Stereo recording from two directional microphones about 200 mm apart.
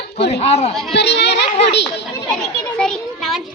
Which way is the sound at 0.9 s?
55° left (ahead or behind).